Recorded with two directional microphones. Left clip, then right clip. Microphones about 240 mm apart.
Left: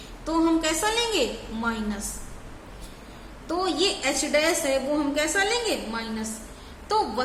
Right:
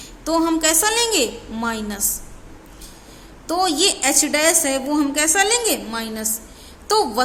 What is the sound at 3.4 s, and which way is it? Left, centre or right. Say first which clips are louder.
A woman's voice: right 6 dB; right.